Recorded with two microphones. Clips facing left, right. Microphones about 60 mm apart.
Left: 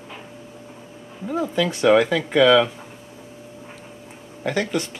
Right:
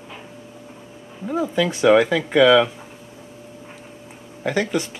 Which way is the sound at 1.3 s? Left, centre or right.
Centre.